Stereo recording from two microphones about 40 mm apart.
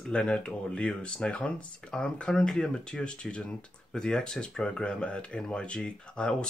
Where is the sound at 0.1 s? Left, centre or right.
Left.